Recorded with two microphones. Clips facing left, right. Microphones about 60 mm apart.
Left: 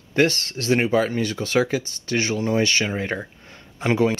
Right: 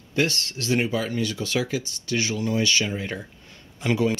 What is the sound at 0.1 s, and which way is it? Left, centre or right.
Speech, left.